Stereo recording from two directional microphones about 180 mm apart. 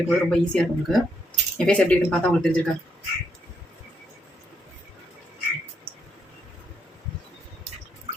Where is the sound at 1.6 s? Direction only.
5° left (ahead or behind).